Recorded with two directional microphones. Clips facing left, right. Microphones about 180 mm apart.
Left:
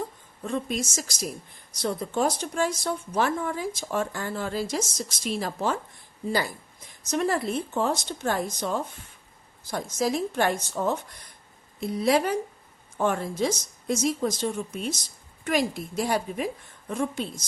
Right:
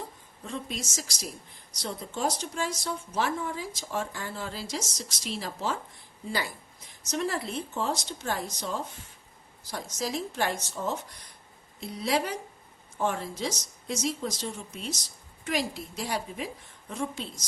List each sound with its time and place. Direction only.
0.4 s a woman's voice: 50° left (ahead or behind)
7.1 s a woman's voice: 55° left (ahead or behind)